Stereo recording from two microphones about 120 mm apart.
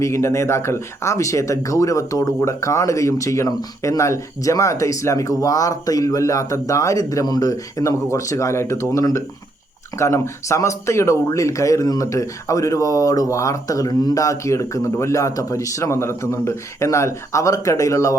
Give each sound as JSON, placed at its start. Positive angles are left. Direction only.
{"t": 0.0, "sound": "speech", "side_deg": 25}